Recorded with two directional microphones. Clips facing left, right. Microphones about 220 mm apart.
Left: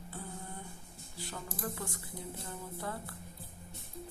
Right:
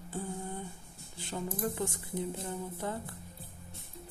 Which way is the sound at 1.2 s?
20° right (ahead or behind).